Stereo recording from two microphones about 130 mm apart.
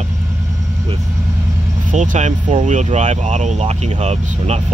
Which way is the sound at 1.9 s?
65° right (ahead or behind).